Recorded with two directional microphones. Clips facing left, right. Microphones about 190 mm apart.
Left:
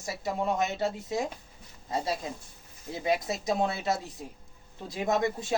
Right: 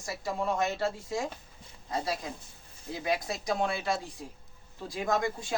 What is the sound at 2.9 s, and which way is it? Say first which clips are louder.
Speech: left 3 dB; 25° left (ahead or behind).